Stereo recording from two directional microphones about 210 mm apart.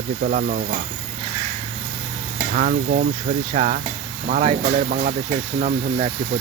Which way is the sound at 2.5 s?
40° right (ahead or behind).